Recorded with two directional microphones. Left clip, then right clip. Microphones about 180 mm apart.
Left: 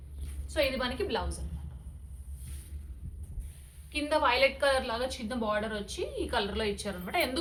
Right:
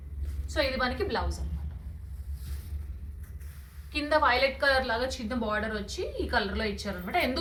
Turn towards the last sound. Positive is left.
turn(degrees=45)  # may be behind; listen again after turning